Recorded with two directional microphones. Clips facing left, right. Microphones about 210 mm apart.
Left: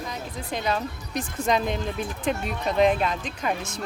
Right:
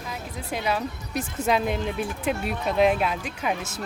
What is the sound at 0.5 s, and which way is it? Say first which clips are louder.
Speech: even; 5° right (ahead or behind).